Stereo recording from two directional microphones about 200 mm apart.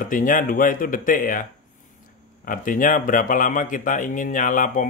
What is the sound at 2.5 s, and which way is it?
Speech, 40° left (ahead or behind).